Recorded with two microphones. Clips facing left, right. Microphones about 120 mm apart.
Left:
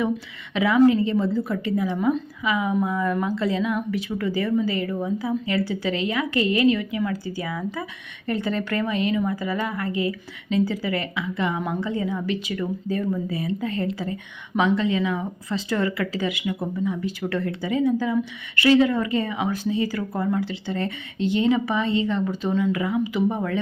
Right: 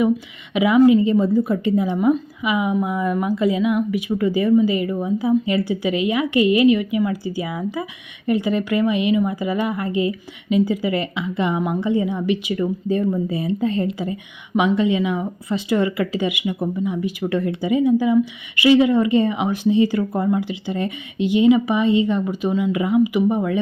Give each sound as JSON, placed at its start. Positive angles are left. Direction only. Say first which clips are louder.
{"t": 0.5, "sound": "a woman's voice", "louder": "right 4 dB", "side_deg": -15}